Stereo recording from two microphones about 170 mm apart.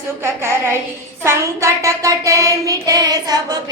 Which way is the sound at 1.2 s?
15° right (ahead or behind).